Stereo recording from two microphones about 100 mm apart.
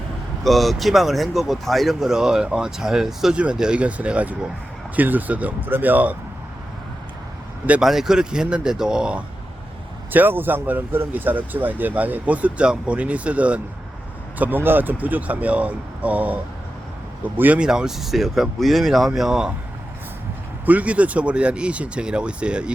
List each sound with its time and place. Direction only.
0.4 s speech: centre (ahead or behind); by 6.1 s 15° right (ahead or behind)
7.7 s speech: 5° right (ahead or behind)
10.1 s speech: 20° right (ahead or behind)
20.7 s speech: 15° right (ahead or behind)